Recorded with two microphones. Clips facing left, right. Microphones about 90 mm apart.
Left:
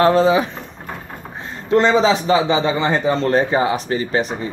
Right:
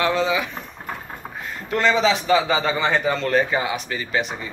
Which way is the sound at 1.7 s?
30° left (ahead or behind).